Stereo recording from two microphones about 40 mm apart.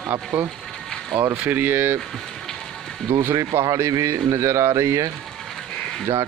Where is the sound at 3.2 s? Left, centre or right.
Right.